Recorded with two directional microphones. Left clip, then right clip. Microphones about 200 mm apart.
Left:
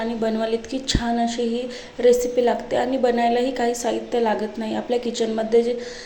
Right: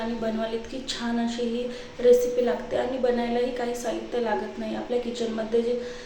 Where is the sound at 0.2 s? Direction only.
30° left (ahead or behind).